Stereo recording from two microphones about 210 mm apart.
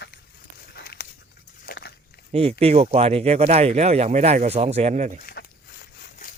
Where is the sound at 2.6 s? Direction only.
30° right (ahead or behind).